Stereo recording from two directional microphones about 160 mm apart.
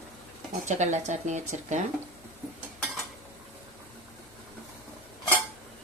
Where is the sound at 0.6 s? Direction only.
45° right (ahead or behind).